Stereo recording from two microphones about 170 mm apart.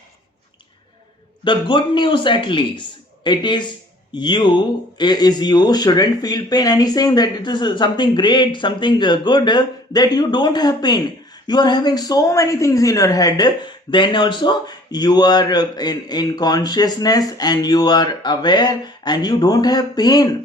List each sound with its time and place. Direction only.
1.5 s speech: 30° left (ahead or behind)